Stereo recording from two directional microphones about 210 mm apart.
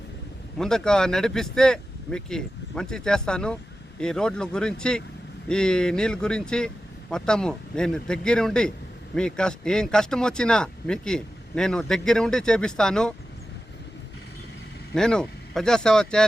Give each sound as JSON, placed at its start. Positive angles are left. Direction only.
{"t": 0.6, "sound": "speech", "side_deg": 5}
{"t": 14.9, "sound": "speech", "side_deg": 5}